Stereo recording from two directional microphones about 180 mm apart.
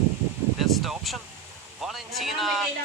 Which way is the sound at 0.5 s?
Centre (ahead or behind).